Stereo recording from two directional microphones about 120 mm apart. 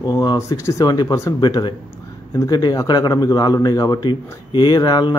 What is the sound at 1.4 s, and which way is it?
A man's voice, 40° left (ahead or behind).